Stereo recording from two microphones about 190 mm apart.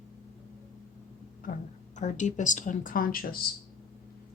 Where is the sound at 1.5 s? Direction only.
55° left (ahead or behind).